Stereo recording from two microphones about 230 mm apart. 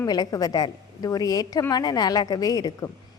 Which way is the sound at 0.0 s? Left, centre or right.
Centre.